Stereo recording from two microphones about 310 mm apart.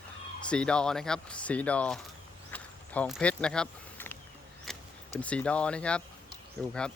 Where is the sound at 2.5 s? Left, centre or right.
Centre.